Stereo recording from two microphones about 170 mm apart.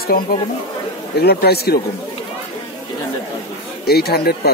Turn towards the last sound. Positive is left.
turn(degrees=65)  # may be behind; listen again after turning